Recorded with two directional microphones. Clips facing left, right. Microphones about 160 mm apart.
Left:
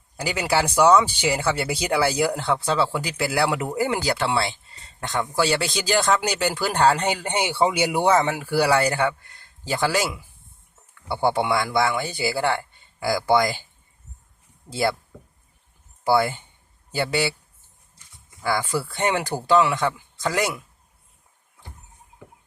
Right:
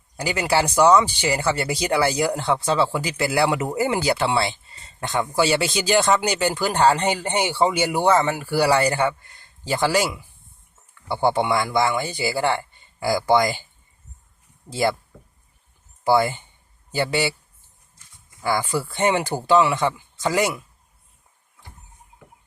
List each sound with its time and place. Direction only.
0.2 s speech: centre (ahead or behind)
8.4 s speech: centre (ahead or behind)
14.7 s speech: centre (ahead or behind)
16.0 s speech: centre (ahead or behind)
18.4 s speech: centre (ahead or behind)